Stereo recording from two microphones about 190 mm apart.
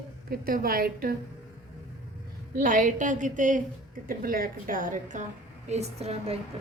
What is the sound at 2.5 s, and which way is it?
A woman's voice, 45° right (ahead or behind).